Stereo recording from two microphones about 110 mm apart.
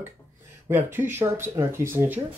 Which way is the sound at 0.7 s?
20° right (ahead or behind).